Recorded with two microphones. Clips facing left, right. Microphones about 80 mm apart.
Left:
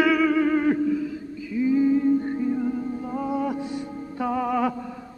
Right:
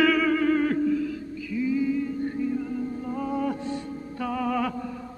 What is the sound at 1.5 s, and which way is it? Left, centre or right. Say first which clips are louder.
Music: left 5 dB; left.